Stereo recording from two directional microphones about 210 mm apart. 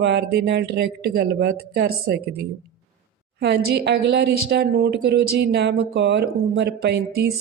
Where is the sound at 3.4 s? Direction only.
50° right (ahead or behind).